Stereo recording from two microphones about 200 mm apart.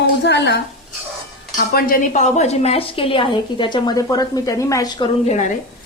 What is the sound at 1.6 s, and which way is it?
A woman's voice, 45° left (ahead or behind).